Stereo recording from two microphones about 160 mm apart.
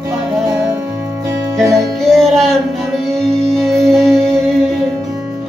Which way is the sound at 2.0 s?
Centre (ahead or behind).